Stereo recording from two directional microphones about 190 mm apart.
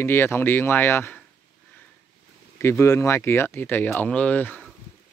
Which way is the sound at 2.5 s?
15° left (ahead or behind).